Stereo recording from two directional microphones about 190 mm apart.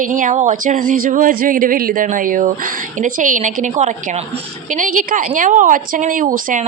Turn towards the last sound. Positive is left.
turn(degrees=-45)  # may be behind; listen again after turning